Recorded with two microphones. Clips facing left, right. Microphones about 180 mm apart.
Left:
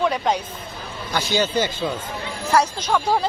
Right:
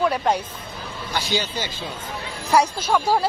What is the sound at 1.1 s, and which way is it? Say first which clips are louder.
Speech: left 5 dB; 50° left (ahead or behind).